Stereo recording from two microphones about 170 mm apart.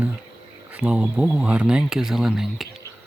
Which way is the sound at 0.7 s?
5° right (ahead or behind).